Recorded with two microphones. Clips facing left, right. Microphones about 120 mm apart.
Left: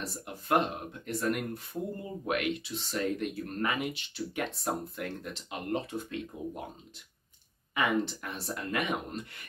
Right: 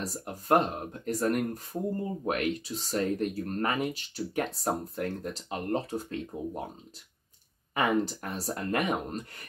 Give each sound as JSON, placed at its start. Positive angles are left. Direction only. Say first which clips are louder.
{"t": 0.0, "sound": "speech", "louder": "right 3 dB", "side_deg": -40}
{"t": 7.7, "sound": "speech", "louder": "right 2 dB", "side_deg": -40}